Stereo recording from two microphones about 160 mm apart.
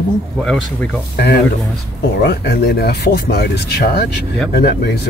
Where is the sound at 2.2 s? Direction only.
75° left (ahead or behind).